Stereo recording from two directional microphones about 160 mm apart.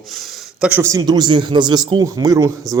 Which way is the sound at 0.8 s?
20° right (ahead or behind).